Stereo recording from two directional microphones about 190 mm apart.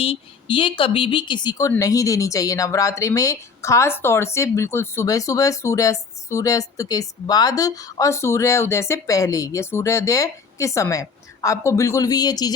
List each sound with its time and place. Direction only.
0.0 s speech: 25° left (ahead or behind)